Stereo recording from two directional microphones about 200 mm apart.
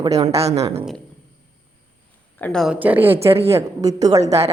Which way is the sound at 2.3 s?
5° left (ahead or behind).